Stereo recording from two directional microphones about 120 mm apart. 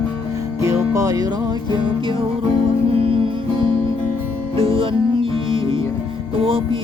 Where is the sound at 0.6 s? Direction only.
25° right (ahead or behind).